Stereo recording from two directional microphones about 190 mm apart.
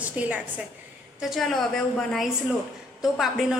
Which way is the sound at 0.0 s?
10° right (ahead or behind).